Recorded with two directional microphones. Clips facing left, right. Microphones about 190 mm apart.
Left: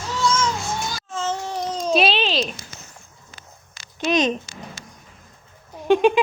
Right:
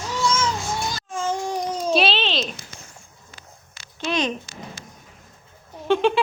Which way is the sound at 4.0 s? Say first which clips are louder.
Left 4 dB; 20° left (ahead or behind).